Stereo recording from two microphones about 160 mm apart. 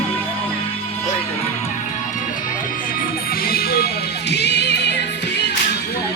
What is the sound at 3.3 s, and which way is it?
Music, 70° left (ahead or behind).